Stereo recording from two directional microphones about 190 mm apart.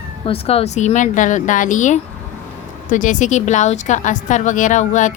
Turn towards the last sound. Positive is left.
turn(degrees=40)  # may be behind; listen again after turning